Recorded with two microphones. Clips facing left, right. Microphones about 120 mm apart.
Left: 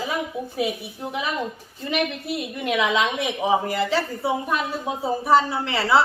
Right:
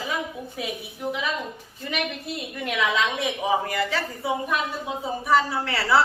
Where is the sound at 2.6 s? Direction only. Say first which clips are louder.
Left 2 dB; 20° left (ahead or behind).